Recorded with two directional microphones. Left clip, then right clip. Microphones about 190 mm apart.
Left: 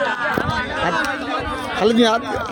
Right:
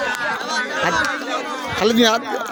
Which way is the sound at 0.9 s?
55° left (ahead or behind).